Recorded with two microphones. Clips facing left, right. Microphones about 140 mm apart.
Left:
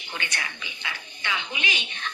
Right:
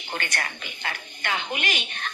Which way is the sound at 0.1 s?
50° right (ahead or behind).